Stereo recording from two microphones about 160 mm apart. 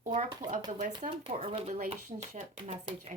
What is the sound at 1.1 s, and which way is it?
Speech, 35° right (ahead or behind).